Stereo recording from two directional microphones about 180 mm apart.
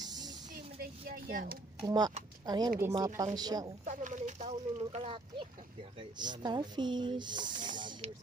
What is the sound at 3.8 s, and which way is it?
Speech, 45° right (ahead or behind).